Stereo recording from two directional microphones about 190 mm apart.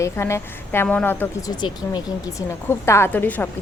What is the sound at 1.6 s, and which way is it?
Speech, 25° left (ahead or behind).